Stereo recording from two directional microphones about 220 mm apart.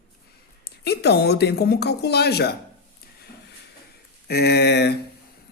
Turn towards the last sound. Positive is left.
turn(degrees=50)  # may be behind; listen again after turning